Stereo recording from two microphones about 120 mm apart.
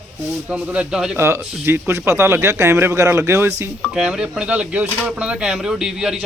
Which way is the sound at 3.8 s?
5° right (ahead or behind).